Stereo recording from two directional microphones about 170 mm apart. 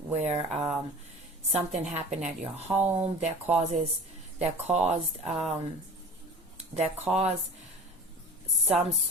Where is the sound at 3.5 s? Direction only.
40° right (ahead or behind).